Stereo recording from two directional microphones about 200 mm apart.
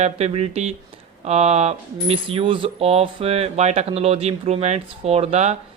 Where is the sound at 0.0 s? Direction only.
30° right (ahead or behind).